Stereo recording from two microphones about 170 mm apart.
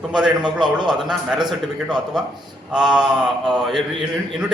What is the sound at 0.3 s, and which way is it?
Speech, 25° right (ahead or behind).